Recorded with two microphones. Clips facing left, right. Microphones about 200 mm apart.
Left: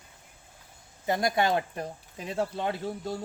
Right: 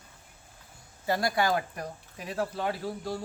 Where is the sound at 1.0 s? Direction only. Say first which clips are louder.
Left 1 dB; 20° left (ahead or behind).